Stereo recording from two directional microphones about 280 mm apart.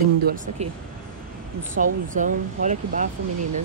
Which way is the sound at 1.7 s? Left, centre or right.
Right.